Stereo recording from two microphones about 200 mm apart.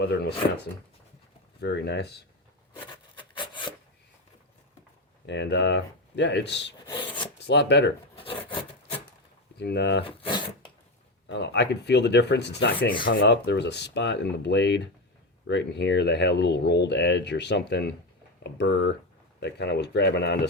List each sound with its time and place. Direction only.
0.0 s speech: 55° left (ahead or behind)
2.7 s rub: 25° left (ahead or behind)
5.2 s speech: 60° left (ahead or behind)
8.1 s wood: 25° left (ahead or behind)
9.6 s speech: 55° left (ahead or behind)
10.0 s speech: 25° left (ahead or behind)
11.3 s speech: 60° left (ahead or behind)